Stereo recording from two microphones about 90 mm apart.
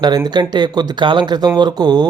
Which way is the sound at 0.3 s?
55° right (ahead or behind).